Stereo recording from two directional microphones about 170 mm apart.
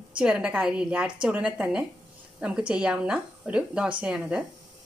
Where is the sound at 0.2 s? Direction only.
5° right (ahead or behind).